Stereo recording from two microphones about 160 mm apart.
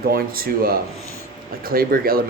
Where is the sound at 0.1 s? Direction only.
65° right (ahead or behind).